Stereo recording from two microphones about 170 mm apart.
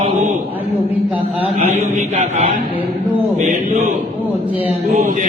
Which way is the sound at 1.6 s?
50° right (ahead or behind).